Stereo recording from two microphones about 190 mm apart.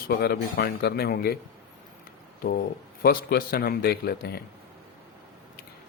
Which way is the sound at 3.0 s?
50° left (ahead or behind).